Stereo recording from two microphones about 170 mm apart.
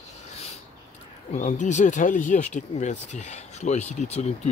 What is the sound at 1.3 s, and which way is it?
Speech, 45° left (ahead or behind).